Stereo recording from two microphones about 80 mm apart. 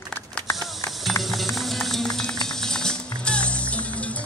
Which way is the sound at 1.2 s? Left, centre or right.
Centre.